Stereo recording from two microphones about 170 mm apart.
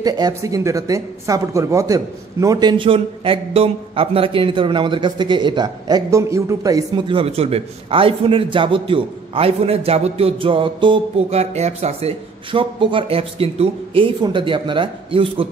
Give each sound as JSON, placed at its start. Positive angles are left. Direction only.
{"t": 0.0, "sound": "a man's voice", "side_deg": -20}